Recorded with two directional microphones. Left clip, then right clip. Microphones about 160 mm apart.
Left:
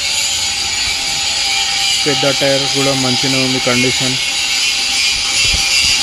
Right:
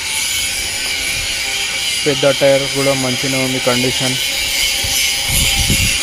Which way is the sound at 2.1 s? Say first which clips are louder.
Right 5 dB; 5° left (ahead or behind).